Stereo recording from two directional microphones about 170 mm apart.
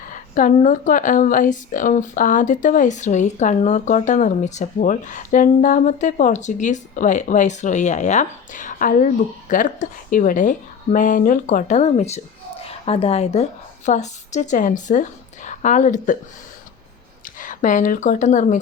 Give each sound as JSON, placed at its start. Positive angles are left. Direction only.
{"t": 0.1, "sound": "a woman's voice", "side_deg": 50}
{"t": 17.2, "sound": "speech", "side_deg": 50}